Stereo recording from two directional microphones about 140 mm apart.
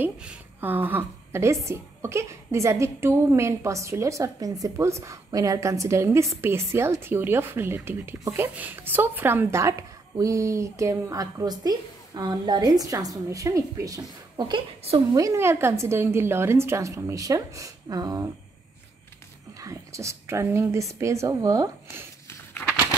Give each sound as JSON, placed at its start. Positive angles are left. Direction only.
{"t": 0.0, "sound": "a woman's voice", "side_deg": -10}
{"t": 19.6, "sound": "a woman's voice", "side_deg": -20}
{"t": 22.3, "sound": "a sound", "side_deg": 15}